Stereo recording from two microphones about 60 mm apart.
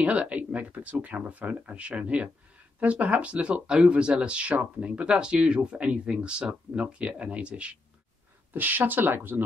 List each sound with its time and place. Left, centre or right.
0.0 s speech: right
8.5 s speech: right